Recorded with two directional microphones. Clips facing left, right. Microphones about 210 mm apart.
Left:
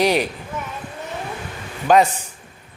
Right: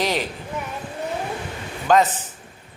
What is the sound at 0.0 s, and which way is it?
Speech, 15° left (ahead or behind).